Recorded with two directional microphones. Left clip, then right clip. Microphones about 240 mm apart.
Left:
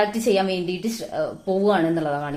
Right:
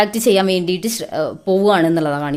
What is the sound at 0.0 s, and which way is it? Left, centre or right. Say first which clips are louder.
A woman's voice: right 6 dB; right.